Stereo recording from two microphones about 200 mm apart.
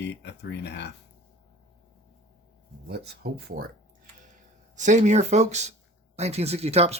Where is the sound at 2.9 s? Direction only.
55° right (ahead or behind).